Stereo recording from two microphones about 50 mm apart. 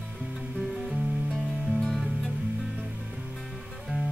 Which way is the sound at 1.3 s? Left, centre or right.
Centre.